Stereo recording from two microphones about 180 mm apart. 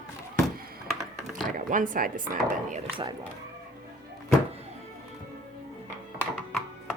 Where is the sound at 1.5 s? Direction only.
45° right (ahead or behind).